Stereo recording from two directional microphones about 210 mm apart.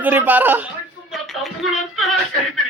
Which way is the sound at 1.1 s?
Centre (ahead or behind).